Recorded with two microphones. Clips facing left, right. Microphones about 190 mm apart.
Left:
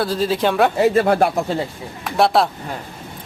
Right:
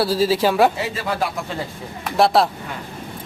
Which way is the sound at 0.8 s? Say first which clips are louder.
Left 9 dB; 55° left (ahead or behind).